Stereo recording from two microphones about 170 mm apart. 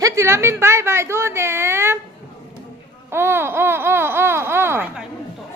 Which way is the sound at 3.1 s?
15° right (ahead or behind).